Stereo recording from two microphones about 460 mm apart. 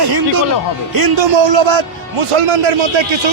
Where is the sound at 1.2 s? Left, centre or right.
Right.